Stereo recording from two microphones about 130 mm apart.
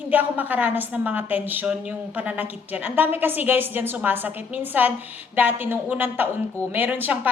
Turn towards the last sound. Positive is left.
turn(degrees=-15)  # may be behind; listen again after turning